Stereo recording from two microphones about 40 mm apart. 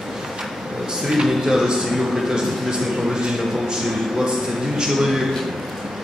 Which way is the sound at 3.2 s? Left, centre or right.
Centre.